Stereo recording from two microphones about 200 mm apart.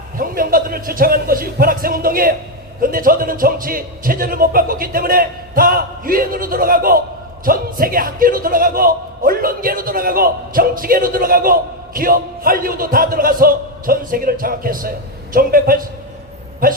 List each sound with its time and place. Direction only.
0.2 s speech: 45° right (ahead or behind)